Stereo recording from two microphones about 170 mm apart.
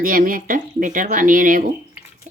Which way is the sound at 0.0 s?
55° right (ahead or behind).